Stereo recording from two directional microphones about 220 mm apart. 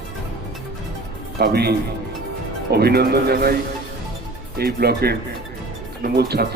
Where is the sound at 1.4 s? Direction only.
45° right (ahead or behind).